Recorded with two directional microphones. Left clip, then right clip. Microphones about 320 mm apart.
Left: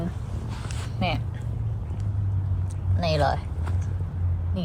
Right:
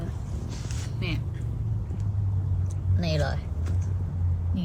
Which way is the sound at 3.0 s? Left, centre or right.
Centre.